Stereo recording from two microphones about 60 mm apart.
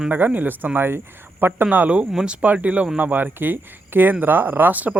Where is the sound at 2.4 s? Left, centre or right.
Right.